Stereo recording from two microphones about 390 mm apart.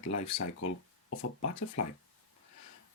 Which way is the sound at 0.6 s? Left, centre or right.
Left.